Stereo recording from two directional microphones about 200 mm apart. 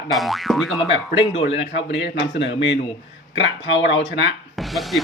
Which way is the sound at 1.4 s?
65° left (ahead or behind).